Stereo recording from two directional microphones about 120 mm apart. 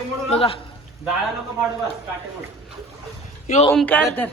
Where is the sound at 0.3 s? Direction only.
50° left (ahead or behind).